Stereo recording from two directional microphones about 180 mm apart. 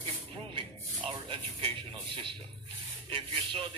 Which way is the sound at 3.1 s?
30° right (ahead or behind).